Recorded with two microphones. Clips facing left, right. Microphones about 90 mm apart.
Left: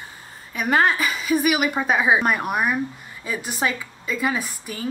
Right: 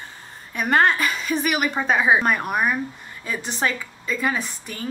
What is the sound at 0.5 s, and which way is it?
A woman's voice, centre (ahead or behind).